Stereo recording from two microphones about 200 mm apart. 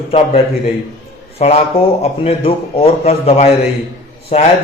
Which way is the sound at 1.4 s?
30° left (ahead or behind).